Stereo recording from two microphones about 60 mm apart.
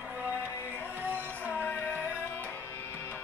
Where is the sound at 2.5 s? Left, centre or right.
Left.